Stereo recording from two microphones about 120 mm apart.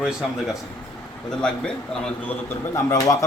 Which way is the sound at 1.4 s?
5° left (ahead or behind).